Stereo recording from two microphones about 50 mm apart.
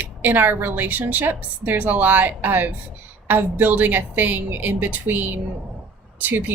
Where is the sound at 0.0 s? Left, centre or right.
Right.